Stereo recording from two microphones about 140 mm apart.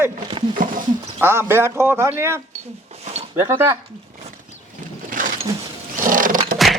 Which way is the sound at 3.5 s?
20° right (ahead or behind).